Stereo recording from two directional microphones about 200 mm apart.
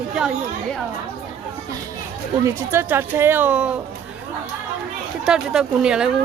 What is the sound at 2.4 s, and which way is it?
Speech, 10° right (ahead or behind).